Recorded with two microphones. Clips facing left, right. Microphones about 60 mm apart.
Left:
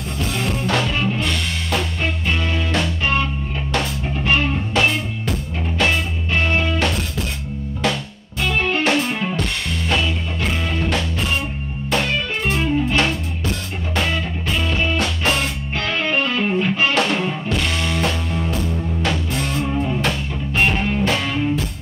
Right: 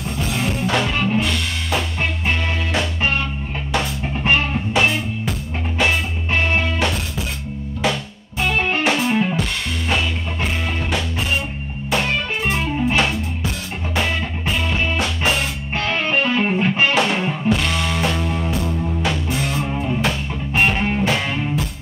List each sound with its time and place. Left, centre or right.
0.2 s music: centre
4.7 s music: centre
6.8 s music: centre
8.5 s music: centre
14.5 s music: centre
15.9 s music: right
16.9 s music: centre